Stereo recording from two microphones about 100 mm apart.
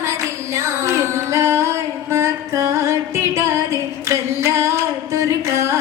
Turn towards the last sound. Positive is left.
turn(degrees=-30)  # may be behind; listen again after turning